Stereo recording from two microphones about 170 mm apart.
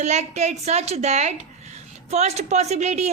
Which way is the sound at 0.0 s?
40° right (ahead or behind).